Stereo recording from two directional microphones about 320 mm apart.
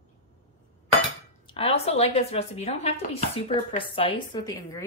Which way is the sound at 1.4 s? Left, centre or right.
Centre.